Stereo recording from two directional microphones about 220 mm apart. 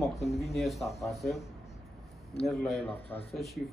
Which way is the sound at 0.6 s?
Centre (ahead or behind).